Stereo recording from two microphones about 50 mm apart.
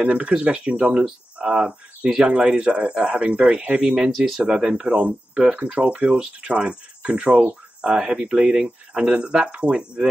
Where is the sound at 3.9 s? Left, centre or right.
Centre.